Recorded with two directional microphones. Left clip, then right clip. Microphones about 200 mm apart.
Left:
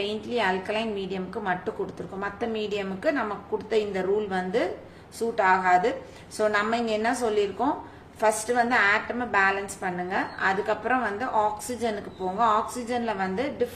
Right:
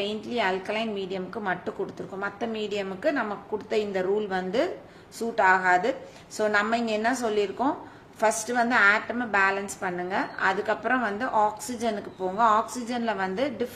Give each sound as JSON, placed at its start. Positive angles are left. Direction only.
{"t": 0.0, "sound": "a woman's voice", "side_deg": -15}